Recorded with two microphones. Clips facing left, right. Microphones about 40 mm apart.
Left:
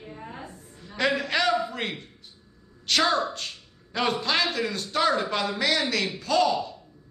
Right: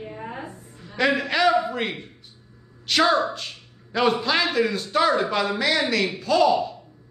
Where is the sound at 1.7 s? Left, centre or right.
Centre.